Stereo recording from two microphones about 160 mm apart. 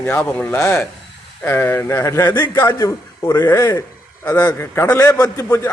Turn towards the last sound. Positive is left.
turn(degrees=20)  # may be behind; listen again after turning